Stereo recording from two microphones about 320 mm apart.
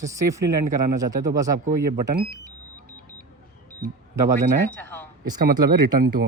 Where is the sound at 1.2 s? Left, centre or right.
Centre.